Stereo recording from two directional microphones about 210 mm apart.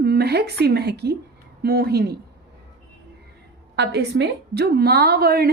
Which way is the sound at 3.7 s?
55° right (ahead or behind).